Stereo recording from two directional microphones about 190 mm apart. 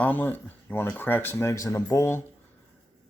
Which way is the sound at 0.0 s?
10° left (ahead or behind).